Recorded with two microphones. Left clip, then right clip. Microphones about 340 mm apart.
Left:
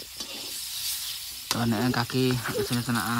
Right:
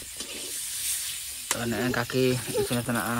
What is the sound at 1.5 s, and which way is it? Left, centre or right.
Speech, centre.